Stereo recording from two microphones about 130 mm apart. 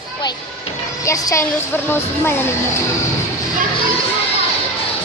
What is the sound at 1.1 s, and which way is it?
Speech, 20° left (ahead or behind).